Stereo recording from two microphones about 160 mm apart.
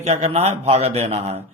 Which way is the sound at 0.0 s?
40° right (ahead or behind).